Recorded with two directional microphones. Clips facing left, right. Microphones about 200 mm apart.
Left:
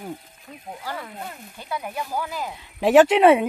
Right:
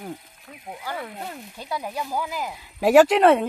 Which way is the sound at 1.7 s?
20° right (ahead or behind).